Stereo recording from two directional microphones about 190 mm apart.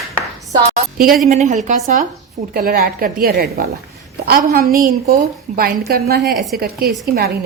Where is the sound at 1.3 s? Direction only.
40° right (ahead or behind).